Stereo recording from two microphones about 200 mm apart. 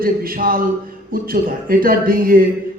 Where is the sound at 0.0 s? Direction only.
45° right (ahead or behind).